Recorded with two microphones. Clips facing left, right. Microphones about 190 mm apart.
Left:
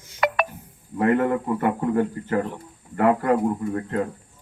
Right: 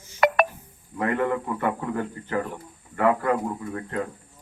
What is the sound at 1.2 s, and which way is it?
Speech, 35° left (ahead or behind).